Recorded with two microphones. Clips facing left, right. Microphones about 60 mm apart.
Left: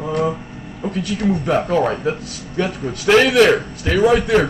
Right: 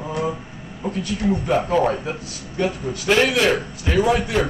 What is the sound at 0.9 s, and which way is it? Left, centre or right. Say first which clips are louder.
A man's voice: left 2 dB; left.